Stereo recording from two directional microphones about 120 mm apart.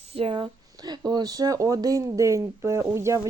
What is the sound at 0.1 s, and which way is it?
Speech, 50° right (ahead or behind).